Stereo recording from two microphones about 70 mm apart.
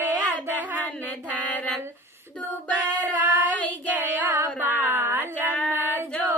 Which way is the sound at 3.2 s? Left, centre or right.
Right.